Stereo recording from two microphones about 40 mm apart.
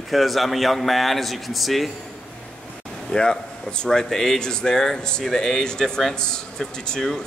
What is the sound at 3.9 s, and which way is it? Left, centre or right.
Speech, centre.